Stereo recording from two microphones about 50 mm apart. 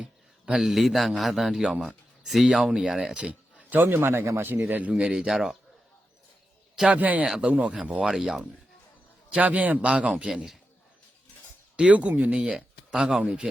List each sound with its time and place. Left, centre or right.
0.0 s a man's voice: centre
3.2 s a sound: right
3.8 s a man's voice: right
4.7 s a man's voice: right
5.1 s speech: centre
6.9 s a man's voice: right
8.0 s speech: centre
9.4 s a man's voice: right; by 10.5 s centre
11.8 s a man's voice: right
12.5 s speech: centre